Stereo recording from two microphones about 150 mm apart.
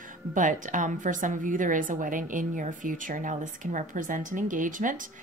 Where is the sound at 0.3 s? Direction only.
60° right (ahead or behind).